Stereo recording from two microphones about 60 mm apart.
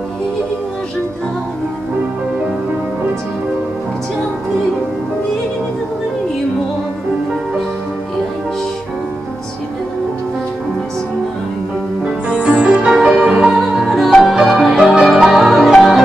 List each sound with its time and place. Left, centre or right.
12.0 s music: centre
13.5 s music: centre